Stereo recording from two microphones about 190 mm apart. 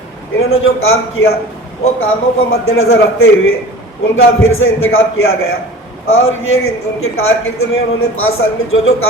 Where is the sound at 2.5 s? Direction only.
90° left.